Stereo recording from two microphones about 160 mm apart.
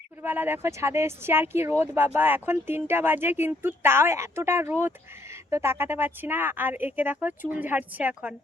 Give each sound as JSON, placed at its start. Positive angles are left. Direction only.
{"t": 0.2, "sound": "speech", "side_deg": -10}